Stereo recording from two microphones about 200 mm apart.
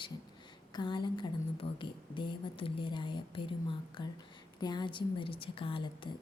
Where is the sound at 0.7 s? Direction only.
20° left (ahead or behind).